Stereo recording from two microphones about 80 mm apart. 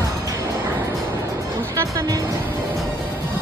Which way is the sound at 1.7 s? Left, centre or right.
Right.